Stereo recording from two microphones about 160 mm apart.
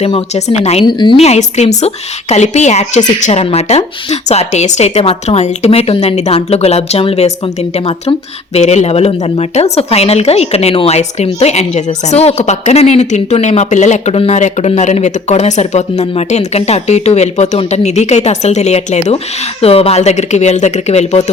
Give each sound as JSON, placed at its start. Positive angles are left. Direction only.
{"t": 0.0, "sound": "speech", "side_deg": 40}
{"t": 0.9, "sound": "a woman's voice", "side_deg": 30}
{"t": 1.2, "sound": "a woman's voice", "side_deg": 45}